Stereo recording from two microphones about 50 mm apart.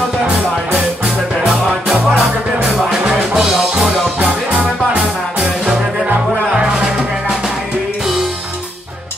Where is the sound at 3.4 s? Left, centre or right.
Centre.